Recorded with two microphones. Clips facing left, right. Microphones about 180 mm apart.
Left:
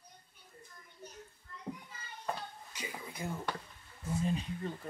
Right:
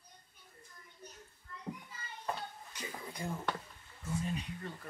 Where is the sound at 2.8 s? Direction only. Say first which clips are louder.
Left 1 dB; 10° left (ahead or behind).